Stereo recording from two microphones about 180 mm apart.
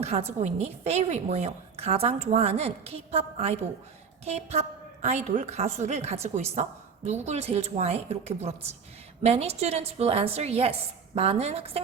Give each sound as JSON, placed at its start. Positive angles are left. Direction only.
{"t": 0.0, "sound": "a woman's voice", "side_deg": -35}